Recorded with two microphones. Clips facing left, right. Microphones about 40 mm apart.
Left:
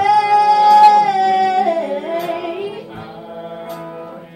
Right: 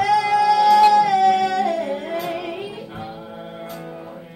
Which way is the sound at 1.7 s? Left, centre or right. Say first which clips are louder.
Left 5 dB; centre.